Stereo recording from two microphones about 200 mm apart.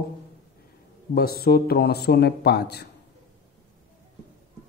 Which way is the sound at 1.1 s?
50° left (ahead or behind).